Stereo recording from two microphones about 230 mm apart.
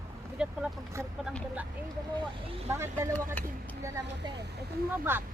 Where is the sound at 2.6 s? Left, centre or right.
Centre.